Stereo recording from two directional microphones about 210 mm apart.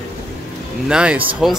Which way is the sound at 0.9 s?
5° right (ahead or behind).